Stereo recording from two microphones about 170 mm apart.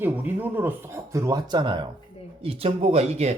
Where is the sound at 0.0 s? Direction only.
10° right (ahead or behind).